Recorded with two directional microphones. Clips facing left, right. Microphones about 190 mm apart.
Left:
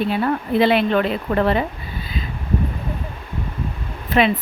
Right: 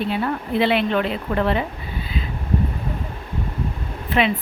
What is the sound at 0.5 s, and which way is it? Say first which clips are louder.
A woman's voice: left 3 dB; 40° left (ahead or behind).